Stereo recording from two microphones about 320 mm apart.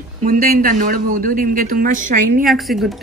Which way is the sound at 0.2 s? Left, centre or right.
Right.